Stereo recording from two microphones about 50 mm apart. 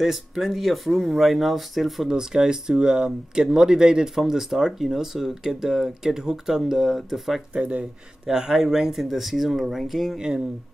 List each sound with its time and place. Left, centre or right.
0.0 s speech: centre
2.0 s speech: centre
7.5 s speech: right
8.3 s speech: centre